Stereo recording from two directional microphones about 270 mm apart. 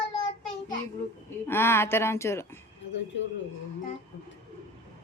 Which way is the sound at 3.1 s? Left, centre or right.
Left.